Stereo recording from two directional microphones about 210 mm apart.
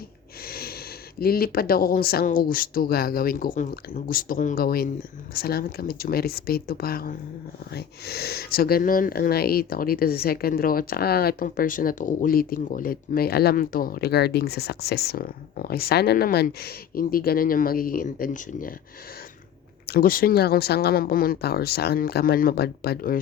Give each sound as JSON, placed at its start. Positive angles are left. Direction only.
{"t": 0.4, "sound": "snort", "side_deg": 45}
{"t": 1.2, "sound": "speech", "side_deg": 45}
{"t": 19.9, "sound": "speech", "side_deg": 45}